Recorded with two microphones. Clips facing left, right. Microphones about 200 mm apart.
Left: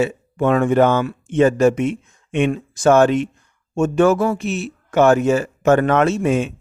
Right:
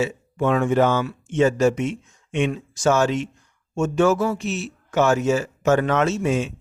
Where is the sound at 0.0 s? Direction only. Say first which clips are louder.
Left 4 dB; 55° left (ahead or behind).